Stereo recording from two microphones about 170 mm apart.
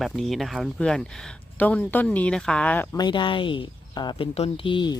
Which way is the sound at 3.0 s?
30° left (ahead or behind).